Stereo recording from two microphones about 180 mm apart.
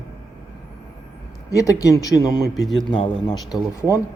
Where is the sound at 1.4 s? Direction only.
20° left (ahead or behind).